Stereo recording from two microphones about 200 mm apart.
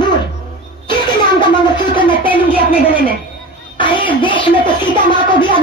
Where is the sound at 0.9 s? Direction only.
25° left (ahead or behind).